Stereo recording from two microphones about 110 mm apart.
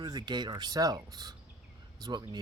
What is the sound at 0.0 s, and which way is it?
Speech, 40° right (ahead or behind).